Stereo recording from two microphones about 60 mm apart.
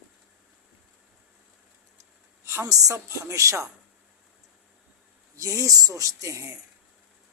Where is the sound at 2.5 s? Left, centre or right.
Right.